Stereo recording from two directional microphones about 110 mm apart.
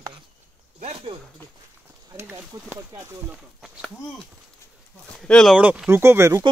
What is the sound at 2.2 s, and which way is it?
Speech, 20° right (ahead or behind).